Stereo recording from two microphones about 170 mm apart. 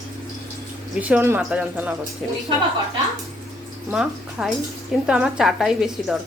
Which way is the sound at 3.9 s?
5° right (ahead or behind).